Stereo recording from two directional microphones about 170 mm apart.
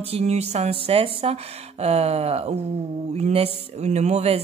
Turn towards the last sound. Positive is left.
turn(degrees=-40)  # may be behind; listen again after turning